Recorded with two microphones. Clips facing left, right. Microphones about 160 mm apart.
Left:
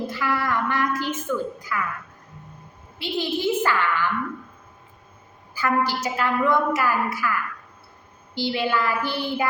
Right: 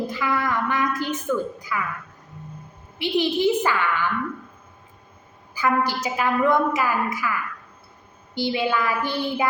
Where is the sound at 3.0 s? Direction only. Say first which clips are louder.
Right 4 dB; 15° right (ahead or behind).